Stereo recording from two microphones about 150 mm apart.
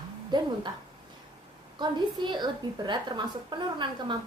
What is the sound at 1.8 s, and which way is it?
A woman's voice, 30° right (ahead or behind).